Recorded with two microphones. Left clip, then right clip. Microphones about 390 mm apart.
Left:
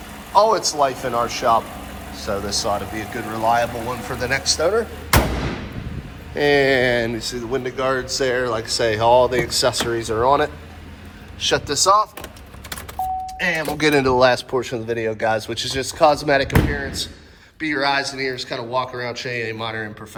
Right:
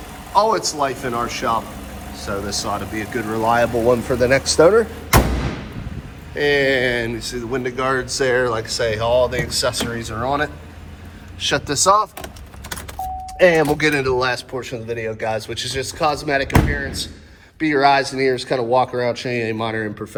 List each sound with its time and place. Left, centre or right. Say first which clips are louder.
0.3 s speech: left 1 dB; centre
6.3 s speech: left 1 dB; centre
13.7 s speech: left 2 dB; centre